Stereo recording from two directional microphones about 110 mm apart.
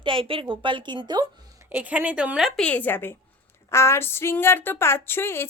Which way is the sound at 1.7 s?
15° right (ahead or behind).